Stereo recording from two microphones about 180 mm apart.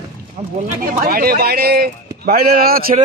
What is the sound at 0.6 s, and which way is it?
Speech, 55° right (ahead or behind).